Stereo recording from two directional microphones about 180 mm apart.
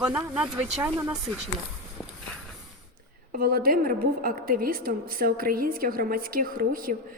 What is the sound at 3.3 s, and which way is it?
A woman's voice, 55° right (ahead or behind).